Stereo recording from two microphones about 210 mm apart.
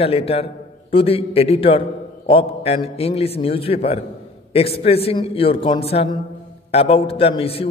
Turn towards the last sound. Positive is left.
turn(degrees=25)  # may be behind; listen again after turning